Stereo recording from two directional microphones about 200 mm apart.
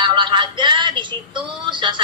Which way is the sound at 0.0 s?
25° right (ahead or behind).